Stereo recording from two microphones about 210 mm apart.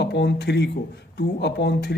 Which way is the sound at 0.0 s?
55° left (ahead or behind).